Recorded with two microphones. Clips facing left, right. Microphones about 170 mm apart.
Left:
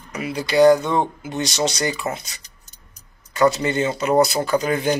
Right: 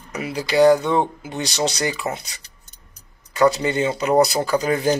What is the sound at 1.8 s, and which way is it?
Speech, 25° right (ahead or behind).